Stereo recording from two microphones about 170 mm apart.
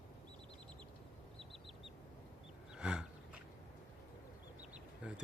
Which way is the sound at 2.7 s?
5° right (ahead or behind).